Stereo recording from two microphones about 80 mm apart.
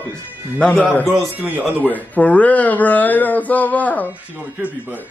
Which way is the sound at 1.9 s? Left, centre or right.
Centre.